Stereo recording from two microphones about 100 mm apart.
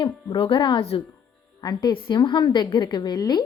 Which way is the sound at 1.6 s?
50° left (ahead or behind).